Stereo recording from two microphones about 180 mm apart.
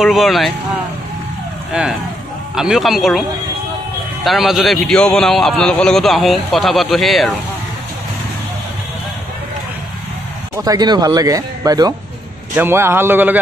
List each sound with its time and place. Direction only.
0.0 s a man's voice: centre (ahead or behind)
1.7 s a man's voice: 5° right (ahead or behind)
10.5 s a man's voice: 20° right (ahead or behind)